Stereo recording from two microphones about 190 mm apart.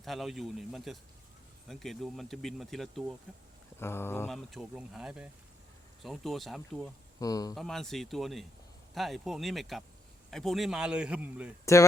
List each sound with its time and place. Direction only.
0.0 s speech: centre (ahead or behind)
3.8 s a sound: 10° left (ahead or behind)
4.3 s speech: 5° right (ahead or behind)
6.8 s speech: 20° left (ahead or behind)
7.5 s speech: centre (ahead or behind)
11.6 s speech: 15° left (ahead or behind)